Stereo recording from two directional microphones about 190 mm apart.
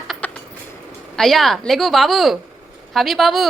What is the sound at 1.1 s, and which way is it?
A woman's voice, centre (ahead or behind).